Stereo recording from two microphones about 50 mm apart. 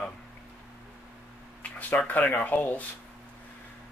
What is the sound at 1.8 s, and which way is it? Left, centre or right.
Speech, left.